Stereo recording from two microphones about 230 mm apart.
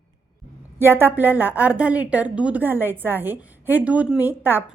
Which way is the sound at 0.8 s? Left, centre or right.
Centre.